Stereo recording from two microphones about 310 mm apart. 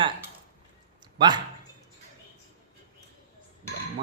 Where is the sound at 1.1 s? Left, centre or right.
Centre.